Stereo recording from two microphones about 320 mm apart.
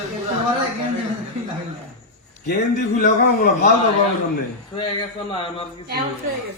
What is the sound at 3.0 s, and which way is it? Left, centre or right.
Speech, left.